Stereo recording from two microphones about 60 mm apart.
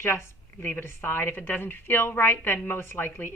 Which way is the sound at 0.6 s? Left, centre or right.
Left.